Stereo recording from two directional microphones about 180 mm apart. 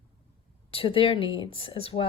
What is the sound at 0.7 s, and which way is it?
Speech, 30° left (ahead or behind).